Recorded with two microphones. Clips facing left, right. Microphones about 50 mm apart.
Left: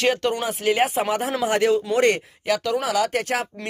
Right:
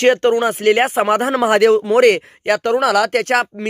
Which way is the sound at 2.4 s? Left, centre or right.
Right.